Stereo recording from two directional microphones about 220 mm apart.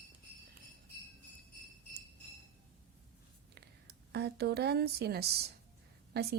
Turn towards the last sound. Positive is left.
turn(degrees=-45)  # may be behind; listen again after turning